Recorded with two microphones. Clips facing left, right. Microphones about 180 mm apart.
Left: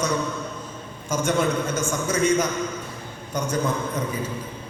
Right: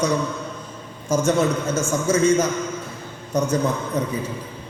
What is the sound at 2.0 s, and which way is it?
A man's voice, 30° right (ahead or behind).